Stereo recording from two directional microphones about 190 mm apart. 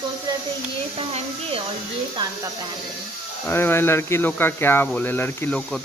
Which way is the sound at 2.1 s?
20° right (ahead or behind).